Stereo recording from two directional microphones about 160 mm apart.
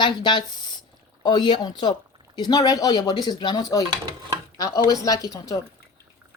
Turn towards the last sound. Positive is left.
turn(degrees=20)  # may be behind; listen again after turning